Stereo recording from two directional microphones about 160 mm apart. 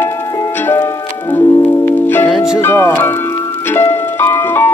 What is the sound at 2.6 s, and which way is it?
Music, 15° left (ahead or behind).